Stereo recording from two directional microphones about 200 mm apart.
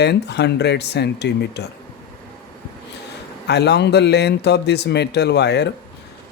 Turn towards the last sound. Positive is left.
turn(degrees=55)  # may be behind; listen again after turning